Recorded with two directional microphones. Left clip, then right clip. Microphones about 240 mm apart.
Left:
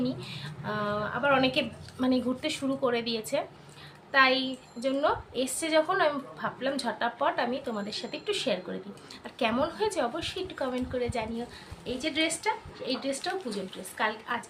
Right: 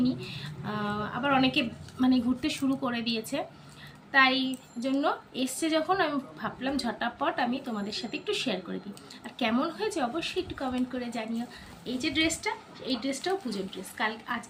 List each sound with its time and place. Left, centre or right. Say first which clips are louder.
0.0 s a woman's voice: right 2 dB; centre